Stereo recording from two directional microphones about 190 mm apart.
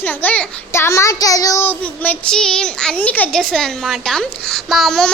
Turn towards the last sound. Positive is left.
turn(degrees=0)  # may be behind; listen again after turning